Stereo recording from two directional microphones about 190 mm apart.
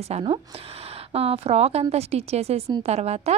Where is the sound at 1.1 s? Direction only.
30° right (ahead or behind).